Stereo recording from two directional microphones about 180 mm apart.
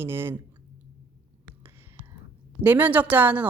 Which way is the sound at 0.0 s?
10° right (ahead or behind).